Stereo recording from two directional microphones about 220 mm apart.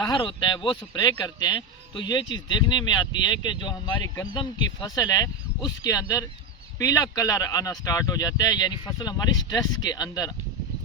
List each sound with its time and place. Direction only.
0.0 s speech: 20° left (ahead or behind)